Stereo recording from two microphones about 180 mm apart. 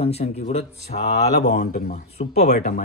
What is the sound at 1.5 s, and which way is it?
Speech, 50° left (ahead or behind).